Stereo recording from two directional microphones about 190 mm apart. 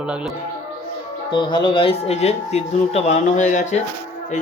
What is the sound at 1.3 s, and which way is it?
Speech, 25° left (ahead or behind).